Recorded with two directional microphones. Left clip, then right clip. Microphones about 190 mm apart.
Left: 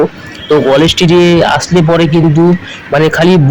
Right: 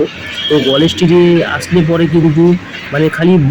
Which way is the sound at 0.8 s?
20° left (ahead or behind).